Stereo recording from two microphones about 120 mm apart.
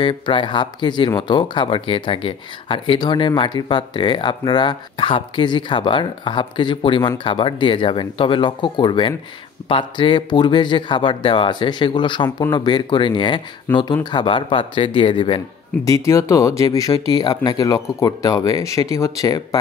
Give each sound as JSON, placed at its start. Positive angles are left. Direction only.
{"t": 0.0, "sound": "speech", "side_deg": 45}
{"t": 13.7, "sound": "speech", "side_deg": 15}
{"t": 14.1, "sound": "speech", "side_deg": 45}
{"t": 15.8, "sound": "speech", "side_deg": 25}